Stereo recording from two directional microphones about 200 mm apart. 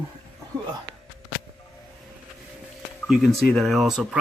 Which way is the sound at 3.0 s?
Centre (ahead or behind).